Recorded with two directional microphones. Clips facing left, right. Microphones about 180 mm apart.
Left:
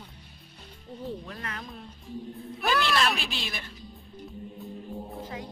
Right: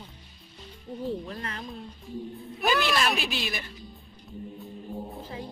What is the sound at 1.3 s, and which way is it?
Speech, 30° right (ahead or behind).